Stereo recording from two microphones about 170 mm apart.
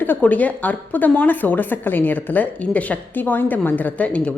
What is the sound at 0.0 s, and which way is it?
A woman's voice, 10° left (ahead or behind).